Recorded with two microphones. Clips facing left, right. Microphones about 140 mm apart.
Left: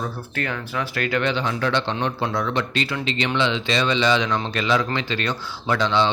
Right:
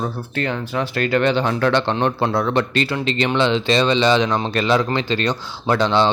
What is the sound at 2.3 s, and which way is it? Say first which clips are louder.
Speech: right 5 dB; 40° right (ahead or behind).